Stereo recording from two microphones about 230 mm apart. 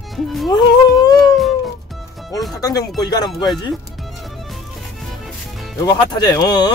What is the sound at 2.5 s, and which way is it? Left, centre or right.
Speech, centre.